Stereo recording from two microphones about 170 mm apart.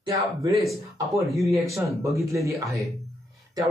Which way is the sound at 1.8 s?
20° right (ahead or behind).